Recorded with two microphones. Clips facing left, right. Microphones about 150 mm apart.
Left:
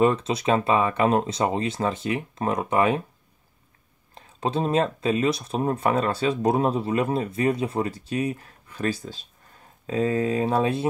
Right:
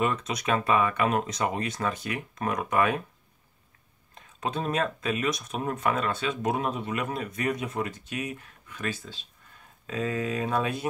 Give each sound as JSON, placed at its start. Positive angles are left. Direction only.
{"t": 0.0, "sound": "speech", "side_deg": 30}
{"t": 4.1, "sound": "speech", "side_deg": 30}